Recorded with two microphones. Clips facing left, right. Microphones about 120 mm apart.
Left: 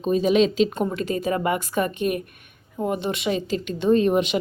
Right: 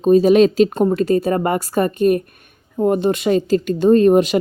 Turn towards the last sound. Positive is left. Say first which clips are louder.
# right 7 dB
turn(degrees=-45)  # may be behind; listen again after turning